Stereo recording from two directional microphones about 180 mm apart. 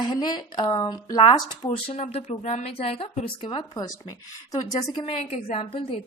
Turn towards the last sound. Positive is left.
turn(degrees=30)  # may be behind; listen again after turning